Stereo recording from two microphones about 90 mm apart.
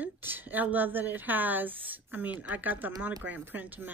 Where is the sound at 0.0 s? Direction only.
20° right (ahead or behind).